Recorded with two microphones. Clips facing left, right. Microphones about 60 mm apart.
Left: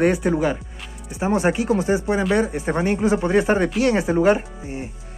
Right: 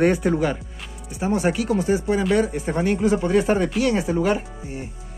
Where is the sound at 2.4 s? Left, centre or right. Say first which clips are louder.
Left 1 dB; centre.